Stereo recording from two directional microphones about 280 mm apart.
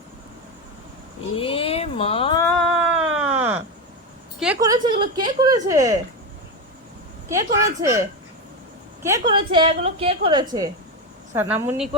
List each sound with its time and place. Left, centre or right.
1.4 s a sound: centre
2.6 s cat: centre
3.1 s a sound: centre
4.4 s a woman's voice: centre
7.3 s a woman's voice: centre
9.0 s a woman's voice: centre